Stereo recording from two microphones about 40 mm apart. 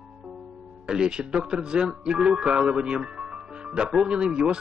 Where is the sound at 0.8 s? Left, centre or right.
Right.